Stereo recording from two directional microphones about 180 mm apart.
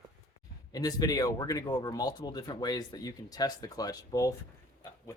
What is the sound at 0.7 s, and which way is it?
Speech, 20° left (ahead or behind).